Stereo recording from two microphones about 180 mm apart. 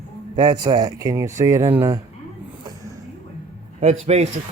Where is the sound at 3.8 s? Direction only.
35° right (ahead or behind).